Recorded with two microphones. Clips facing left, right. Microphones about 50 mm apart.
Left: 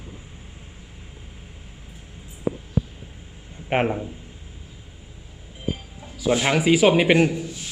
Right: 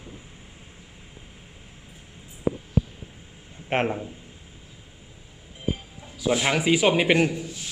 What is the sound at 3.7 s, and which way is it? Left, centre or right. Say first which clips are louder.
Speech: left 3 dB; centre.